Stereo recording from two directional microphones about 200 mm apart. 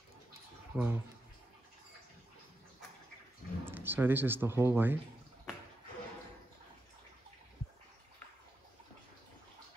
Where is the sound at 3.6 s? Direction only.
10° right (ahead or behind).